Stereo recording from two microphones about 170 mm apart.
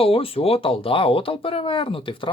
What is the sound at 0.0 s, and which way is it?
Speech, 35° left (ahead or behind).